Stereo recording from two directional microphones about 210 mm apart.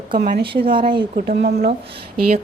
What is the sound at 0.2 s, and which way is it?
Speech, 50° right (ahead or behind).